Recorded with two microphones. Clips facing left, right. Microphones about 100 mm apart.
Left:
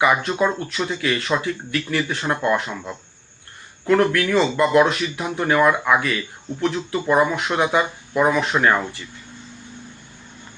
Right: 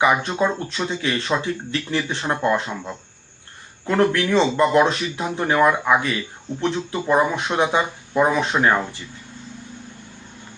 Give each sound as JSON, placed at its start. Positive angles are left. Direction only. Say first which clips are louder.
{"t": 0.0, "sound": "speech", "louder": "even", "side_deg": -20}